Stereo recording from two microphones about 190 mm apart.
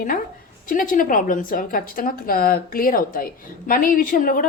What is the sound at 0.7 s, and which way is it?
A woman's voice, 45° left (ahead or behind).